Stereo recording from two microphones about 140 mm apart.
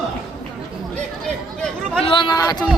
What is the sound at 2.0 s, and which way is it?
Speech, 35° left (ahead or behind).